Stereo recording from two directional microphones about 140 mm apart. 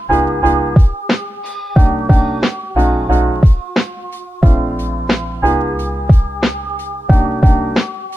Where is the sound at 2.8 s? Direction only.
10° right (ahead or behind).